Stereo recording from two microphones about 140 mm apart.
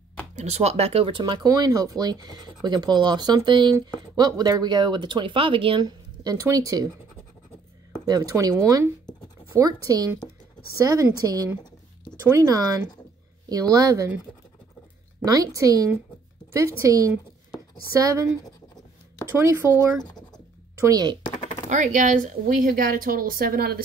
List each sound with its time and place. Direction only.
0.4 s speech: 50° right (ahead or behind); by 6.9 s 25° right (ahead or behind)
8.0 s speech: 25° right (ahead or behind)
15.2 s speech: 25° right (ahead or behind)
20.8 s speech: 30° right (ahead or behind)
21.6 s speech: 60° right (ahead or behind); by 23.8 s 90° right